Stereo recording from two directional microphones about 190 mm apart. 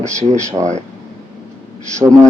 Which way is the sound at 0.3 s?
15° right (ahead or behind).